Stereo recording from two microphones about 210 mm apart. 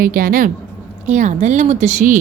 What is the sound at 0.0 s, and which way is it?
Speech, 40° right (ahead or behind).